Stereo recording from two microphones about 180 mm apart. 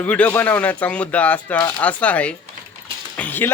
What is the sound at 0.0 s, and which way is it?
Speech, 10° left (ahead or behind).